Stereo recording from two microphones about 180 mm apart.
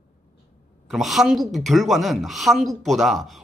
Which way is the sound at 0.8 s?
Centre (ahead or behind).